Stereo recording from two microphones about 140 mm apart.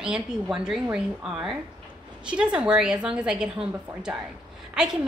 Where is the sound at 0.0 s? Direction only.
5° right (ahead or behind).